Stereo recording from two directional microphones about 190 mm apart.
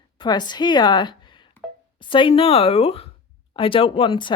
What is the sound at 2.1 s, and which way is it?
Speech, 30° left (ahead or behind).